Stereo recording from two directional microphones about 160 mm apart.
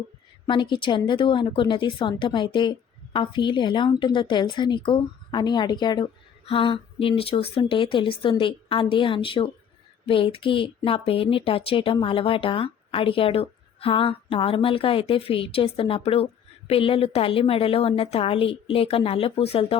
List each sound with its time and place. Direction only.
0.4 s a woman's voice: 30° left (ahead or behind)